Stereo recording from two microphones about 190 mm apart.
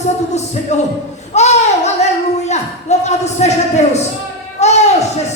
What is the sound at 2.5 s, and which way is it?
Speech, 35° left (ahead or behind).